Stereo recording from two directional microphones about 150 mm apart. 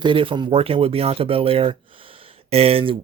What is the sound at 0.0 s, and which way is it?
Speech, 35° right (ahead or behind).